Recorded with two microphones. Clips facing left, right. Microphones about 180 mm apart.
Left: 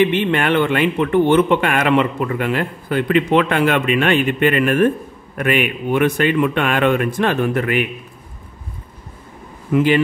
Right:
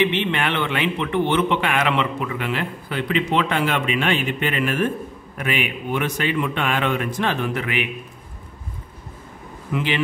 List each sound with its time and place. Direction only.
0.0 s a man's voice: 50° left (ahead or behind)
9.7 s a man's voice: 45° left (ahead or behind)